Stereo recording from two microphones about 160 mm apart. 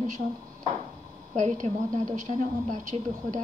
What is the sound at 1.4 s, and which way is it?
Speech, 50° right (ahead or behind).